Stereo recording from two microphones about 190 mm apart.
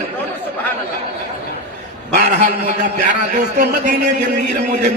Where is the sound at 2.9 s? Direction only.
40° right (ahead or behind).